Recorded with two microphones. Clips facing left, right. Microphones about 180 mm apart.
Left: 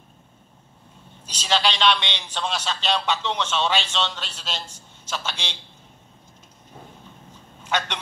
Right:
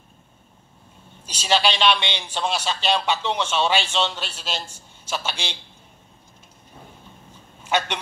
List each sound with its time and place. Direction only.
1.2 s a man's voice: 10° right (ahead or behind)
7.6 s speech: 10° right (ahead or behind)